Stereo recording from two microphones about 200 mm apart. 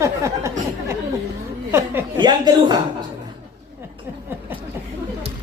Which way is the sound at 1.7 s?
15° right (ahead or behind).